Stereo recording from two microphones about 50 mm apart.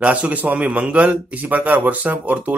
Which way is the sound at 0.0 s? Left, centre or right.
Right.